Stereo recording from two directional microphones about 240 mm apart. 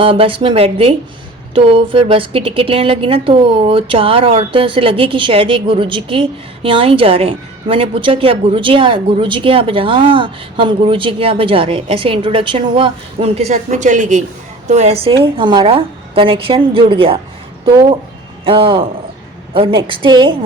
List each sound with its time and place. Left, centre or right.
0.0 s a woman's voice: right
18.4 s a woman's voice: right